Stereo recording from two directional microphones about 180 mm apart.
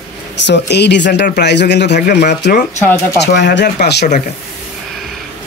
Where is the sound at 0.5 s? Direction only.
70° left (ahead or behind).